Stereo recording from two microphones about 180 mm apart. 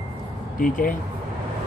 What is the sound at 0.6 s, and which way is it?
Speech, 50° left (ahead or behind).